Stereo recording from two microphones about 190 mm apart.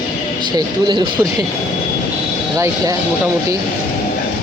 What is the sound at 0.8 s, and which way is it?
Speech, 25° right (ahead or behind).